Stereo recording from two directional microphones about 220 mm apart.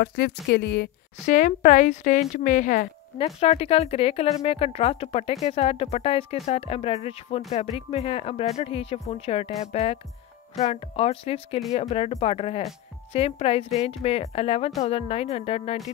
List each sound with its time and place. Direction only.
0.0 s speech: 50° left (ahead or behind)
1.3 s a woman's voice: 35° left (ahead or behind)